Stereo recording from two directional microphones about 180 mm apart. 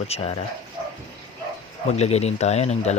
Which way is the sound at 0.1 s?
35° left (ahead or behind).